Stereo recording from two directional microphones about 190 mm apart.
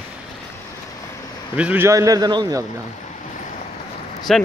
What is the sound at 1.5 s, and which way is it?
A man's voice, 5° right (ahead or behind).